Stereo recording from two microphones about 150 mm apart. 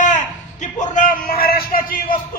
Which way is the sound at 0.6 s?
60° left (ahead or behind).